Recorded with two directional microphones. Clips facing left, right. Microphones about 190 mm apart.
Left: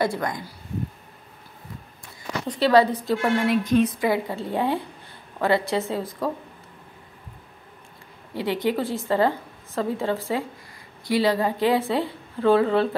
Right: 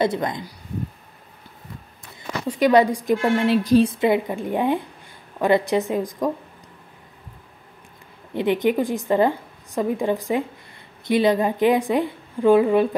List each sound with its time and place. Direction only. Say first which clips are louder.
0.0 s a woman's voice: right 3 dB; 20° right (ahead or behind)
2.4 s a woman's voice: right 2 dB; 10° right (ahead or behind)
3.4 s a woman's voice: right 5 dB; 30° right (ahead or behind); by 6.3 s 15° right (ahead or behind)
8.4 s a woman's voice: right 4 dB; 20° right (ahead or behind)